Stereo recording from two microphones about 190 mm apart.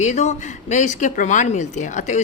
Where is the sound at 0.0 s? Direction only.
35° left (ahead or behind).